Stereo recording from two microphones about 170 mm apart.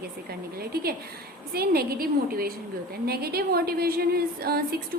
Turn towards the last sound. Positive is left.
turn(degrees=-65)  # may be behind; listen again after turning